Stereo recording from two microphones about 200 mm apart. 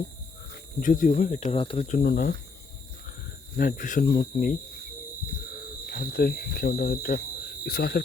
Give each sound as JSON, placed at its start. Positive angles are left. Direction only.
{"t": 0.8, "sound": "speech", "side_deg": 45}
{"t": 3.6, "sound": "speech", "side_deg": 45}
{"t": 5.8, "sound": "speech", "side_deg": 50}